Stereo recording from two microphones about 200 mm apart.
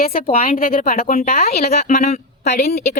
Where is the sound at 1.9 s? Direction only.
45° left (ahead or behind).